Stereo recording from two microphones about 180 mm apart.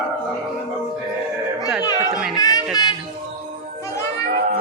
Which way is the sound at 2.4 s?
20° left (ahead or behind).